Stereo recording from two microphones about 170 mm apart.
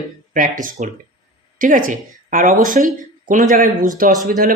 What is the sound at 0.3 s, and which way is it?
A woman's voice, 50° right (ahead or behind).